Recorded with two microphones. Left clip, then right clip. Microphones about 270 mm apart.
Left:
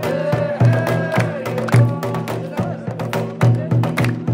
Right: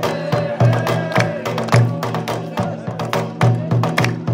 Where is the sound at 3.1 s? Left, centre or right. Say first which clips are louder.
Right 2 dB; centre.